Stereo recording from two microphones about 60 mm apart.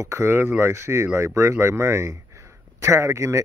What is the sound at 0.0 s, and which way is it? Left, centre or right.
Speech, right.